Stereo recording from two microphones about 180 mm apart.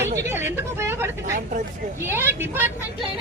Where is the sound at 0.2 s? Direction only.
15° right (ahead or behind).